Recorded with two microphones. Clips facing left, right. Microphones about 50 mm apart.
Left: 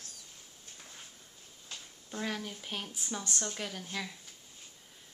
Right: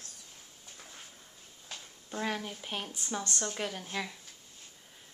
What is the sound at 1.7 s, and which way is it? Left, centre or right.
A woman's voice, centre.